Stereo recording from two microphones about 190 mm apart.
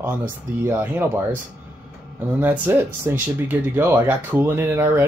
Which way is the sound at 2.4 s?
10° right (ahead or behind).